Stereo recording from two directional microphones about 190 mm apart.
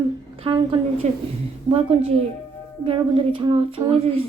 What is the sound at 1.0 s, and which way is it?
Speech, 35° right (ahead or behind).